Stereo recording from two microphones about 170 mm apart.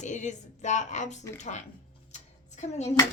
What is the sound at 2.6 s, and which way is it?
Speech, 40° left (ahead or behind).